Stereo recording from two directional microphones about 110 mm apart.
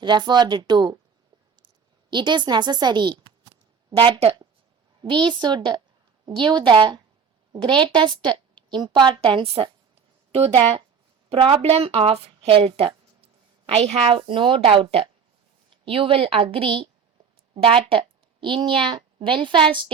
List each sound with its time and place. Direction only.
0.0 s speech: 40° right (ahead or behind)
1.6 s a sound: 45° right (ahead or behind)
3.9 s speech: 55° right (ahead or behind)
5.0 s a woman's voice: 45° right (ahead or behind)